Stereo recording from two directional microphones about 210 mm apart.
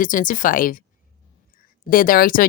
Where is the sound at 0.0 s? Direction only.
40° left (ahead or behind).